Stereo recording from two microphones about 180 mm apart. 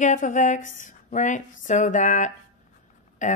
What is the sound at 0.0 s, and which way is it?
A woman's voice, 45° left (ahead or behind).